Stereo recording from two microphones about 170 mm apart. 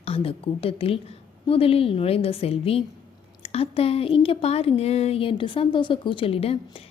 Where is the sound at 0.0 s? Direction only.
35° left (ahead or behind).